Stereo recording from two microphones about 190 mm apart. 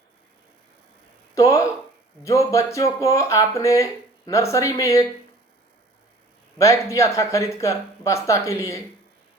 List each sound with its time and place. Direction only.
1.4 s speech: 15° left (ahead or behind)
6.9 s speech: 15° left (ahead or behind)